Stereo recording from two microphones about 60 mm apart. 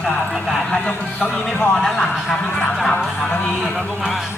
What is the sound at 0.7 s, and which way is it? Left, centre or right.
Speech, centre.